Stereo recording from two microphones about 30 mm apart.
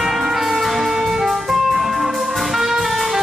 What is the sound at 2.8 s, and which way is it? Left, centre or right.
Music, centre.